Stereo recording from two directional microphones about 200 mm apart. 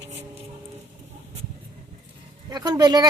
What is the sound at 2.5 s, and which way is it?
Speech, 20° right (ahead or behind).